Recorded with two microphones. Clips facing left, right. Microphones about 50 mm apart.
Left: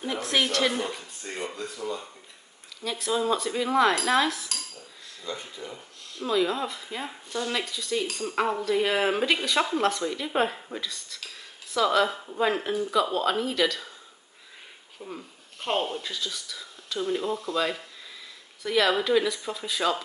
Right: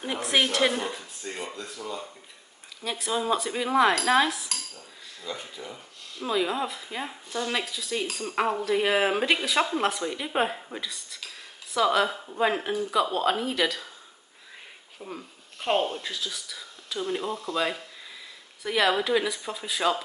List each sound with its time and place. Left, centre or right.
0.0 s speech: centre
1.5 s speech: centre
2.8 s speech: centre
15.0 s speech: centre